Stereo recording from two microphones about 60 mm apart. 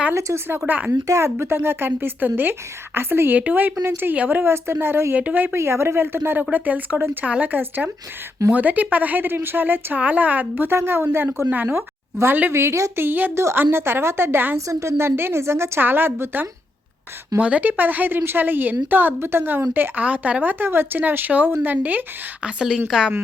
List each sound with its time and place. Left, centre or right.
0.1 s a woman's voice: right
3.3 s a woman's voice: right
5.1 s speech: right
5.5 s a woman's voice: right
12.5 s a woman's voice: right
13.0 s a woman's voice: right
13.3 s a woman's voice: right
14.7 s a woman's voice: right
17.4 s a woman's voice: right
22.4 s a woman's voice: centre